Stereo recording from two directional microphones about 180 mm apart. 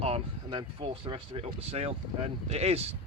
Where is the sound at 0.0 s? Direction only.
30° right (ahead or behind).